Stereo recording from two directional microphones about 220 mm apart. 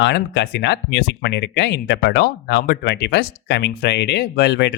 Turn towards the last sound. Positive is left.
turn(degrees=50)  # may be behind; listen again after turning